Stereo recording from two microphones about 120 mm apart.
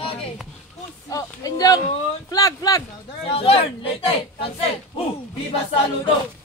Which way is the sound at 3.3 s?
50° left (ahead or behind).